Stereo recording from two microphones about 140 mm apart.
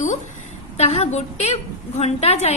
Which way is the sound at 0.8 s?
50° left (ahead or behind).